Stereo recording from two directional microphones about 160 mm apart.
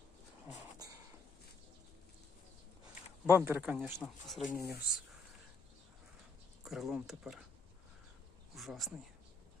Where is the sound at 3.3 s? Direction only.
15° right (ahead or behind).